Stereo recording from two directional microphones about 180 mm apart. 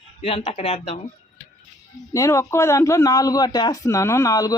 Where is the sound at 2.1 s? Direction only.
15° left (ahead or behind).